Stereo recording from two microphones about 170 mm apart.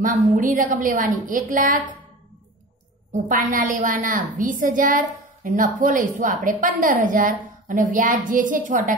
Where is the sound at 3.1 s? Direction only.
55° right (ahead or behind).